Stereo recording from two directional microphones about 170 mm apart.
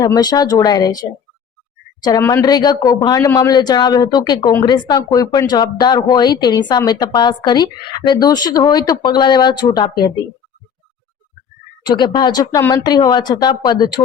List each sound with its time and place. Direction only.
0.0 s speech: 25° left (ahead or behind)
2.0 s speech: 20° left (ahead or behind)
11.9 s speech: 25° left (ahead or behind)